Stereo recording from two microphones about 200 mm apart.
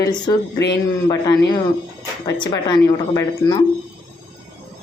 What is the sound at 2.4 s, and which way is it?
Speech, 20° left (ahead or behind).